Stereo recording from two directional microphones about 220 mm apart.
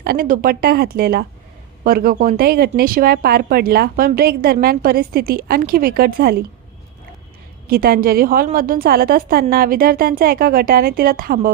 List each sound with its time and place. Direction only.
0.0 s speech: 40° right (ahead or behind)
7.7 s a woman's voice: 40° right (ahead or behind)